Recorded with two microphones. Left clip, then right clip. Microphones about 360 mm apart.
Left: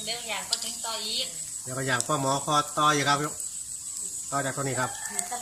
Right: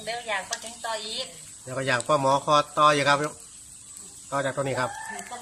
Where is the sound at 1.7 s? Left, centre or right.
Centre.